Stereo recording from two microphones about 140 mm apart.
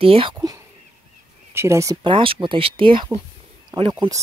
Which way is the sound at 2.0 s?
35° right (ahead or behind).